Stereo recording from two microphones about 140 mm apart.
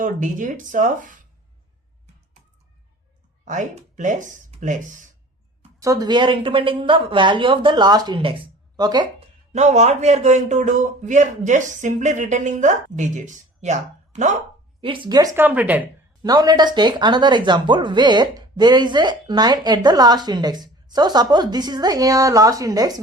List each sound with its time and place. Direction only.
0.0 s speech: 65° right (ahead or behind)
3.4 s speech: 60° right (ahead or behind)
5.8 s speech: 25° right (ahead or behind)
9.5 s speech: 55° right (ahead or behind)
14.8 s speech: 40° right (ahead or behind)
15.4 s speech: 10° right (ahead or behind)
16.2 s speech: 25° right (ahead or behind)